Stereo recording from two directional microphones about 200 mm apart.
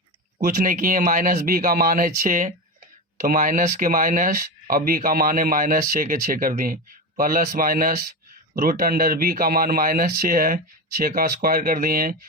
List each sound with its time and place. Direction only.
0.4 s speech: 45° right (ahead or behind)